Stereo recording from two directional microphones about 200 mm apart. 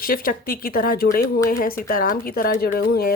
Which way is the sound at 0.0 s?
45° left (ahead or behind).